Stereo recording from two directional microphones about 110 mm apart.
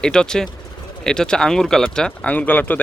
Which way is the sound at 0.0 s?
5° left (ahead or behind).